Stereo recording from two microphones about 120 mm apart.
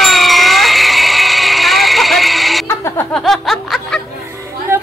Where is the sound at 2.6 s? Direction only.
25° left (ahead or behind).